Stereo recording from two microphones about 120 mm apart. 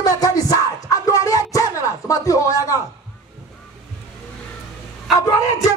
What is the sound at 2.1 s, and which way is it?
Speech, 30° left (ahead or behind).